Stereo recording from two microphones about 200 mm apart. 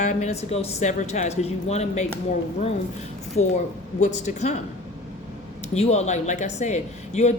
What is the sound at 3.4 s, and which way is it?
Speech, 90° left.